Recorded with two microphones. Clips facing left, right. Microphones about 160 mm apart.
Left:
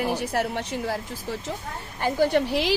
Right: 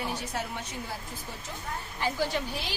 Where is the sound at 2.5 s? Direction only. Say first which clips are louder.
Left 13 dB; 90° left.